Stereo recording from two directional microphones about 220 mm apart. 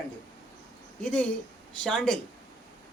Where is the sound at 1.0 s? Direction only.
5° left (ahead or behind).